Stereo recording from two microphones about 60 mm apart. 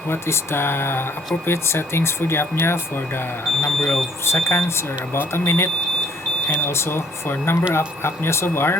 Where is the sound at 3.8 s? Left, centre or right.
Left.